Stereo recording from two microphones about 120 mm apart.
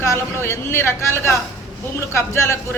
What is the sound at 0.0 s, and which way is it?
A man's voice, 20° left (ahead or behind).